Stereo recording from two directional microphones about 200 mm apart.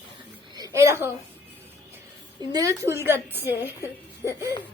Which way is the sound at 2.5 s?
20° right (ahead or behind).